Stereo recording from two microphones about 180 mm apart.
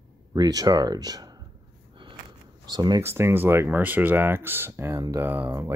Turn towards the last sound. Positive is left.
turn(degrees=-15)  # may be behind; listen again after turning